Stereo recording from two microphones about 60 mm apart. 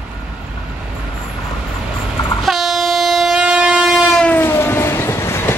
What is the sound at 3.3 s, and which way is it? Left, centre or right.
Train, centre.